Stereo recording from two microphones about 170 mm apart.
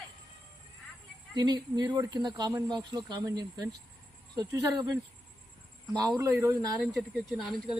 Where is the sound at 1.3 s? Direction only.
25° right (ahead or behind).